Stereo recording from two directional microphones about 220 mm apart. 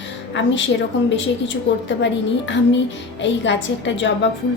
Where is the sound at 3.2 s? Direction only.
55° left (ahead or behind).